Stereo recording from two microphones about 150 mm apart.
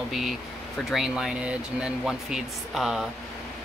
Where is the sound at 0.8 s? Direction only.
5° right (ahead or behind).